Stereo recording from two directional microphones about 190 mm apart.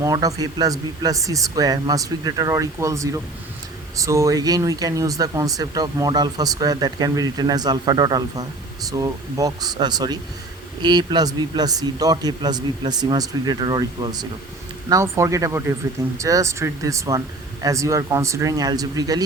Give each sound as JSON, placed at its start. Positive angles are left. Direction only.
{"t": 0.0, "sound": "speech", "side_deg": -20}